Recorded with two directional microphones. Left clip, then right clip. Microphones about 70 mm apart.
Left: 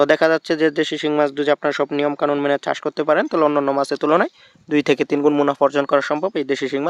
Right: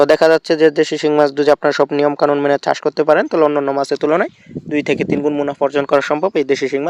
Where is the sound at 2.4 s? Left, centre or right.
Right.